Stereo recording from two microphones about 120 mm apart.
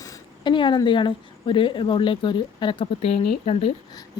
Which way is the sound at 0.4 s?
40° left (ahead or behind).